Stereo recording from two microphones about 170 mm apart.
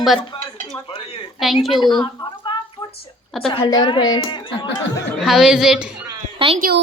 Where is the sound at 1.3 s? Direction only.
Centre (ahead or behind).